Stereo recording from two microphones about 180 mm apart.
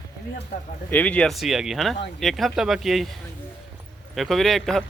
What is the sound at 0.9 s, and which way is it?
Speech, 10° left (ahead or behind).